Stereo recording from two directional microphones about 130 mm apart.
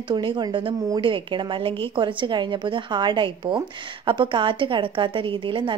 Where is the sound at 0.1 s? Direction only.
35° right (ahead or behind).